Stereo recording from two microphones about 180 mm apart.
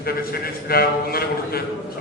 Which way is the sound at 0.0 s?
55° left (ahead or behind).